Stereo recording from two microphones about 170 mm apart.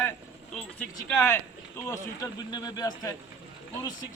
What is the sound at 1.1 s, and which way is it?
Speech, 15° left (ahead or behind).